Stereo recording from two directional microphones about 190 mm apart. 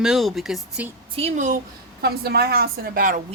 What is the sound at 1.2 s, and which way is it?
Speech, 40° right (ahead or behind).